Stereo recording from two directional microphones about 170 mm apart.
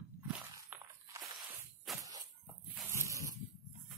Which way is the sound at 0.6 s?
20° right (ahead or behind).